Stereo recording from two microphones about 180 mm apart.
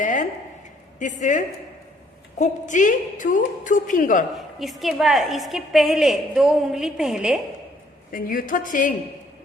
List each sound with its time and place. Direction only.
0.0 s a sound: 45° left (ahead or behind)
0.9 s a woman's voice: 45° left (ahead or behind)
4.6 s a woman's voice: centre (ahead or behind)
8.1 s a woman's voice: 50° left (ahead or behind)